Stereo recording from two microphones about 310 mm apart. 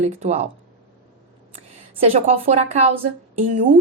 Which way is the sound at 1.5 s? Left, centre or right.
Right.